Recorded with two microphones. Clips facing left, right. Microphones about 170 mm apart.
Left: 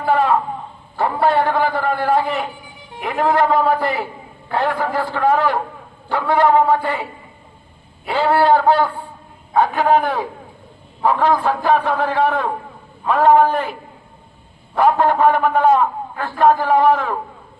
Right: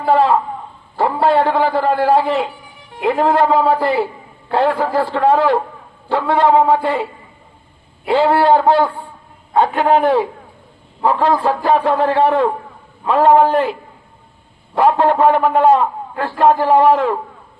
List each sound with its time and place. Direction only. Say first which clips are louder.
0.0 s a sound: right 3 dB; 30° right (ahead or behind)
0.9 s a man's voice: right 2 dB; 30° right (ahead or behind)
8.0 s a man's voice: right 3 dB; 25° right (ahead or behind)
14.8 s a man's voice: right 2 dB; 30° right (ahead or behind)